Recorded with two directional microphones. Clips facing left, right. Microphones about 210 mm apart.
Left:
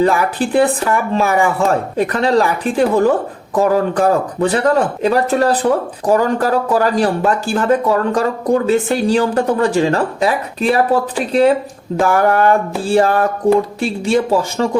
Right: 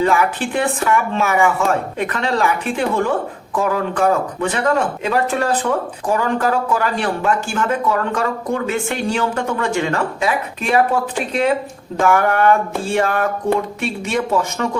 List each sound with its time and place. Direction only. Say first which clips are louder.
0.0 s speech: left 2 dB; 35° left (ahead or behind)